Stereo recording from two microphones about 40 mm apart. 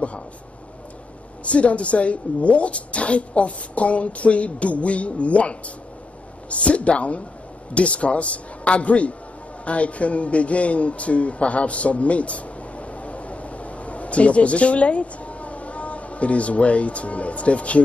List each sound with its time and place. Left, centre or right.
1.4 s speech: left